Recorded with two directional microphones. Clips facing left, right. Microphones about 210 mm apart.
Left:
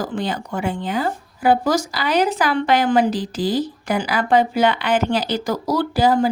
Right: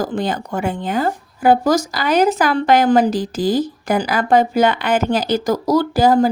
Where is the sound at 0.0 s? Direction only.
40° right (ahead or behind).